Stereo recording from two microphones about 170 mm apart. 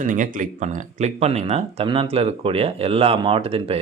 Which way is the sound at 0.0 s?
50° right (ahead or behind).